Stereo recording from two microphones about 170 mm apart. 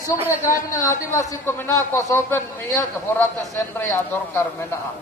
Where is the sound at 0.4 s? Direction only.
15° left (ahead or behind).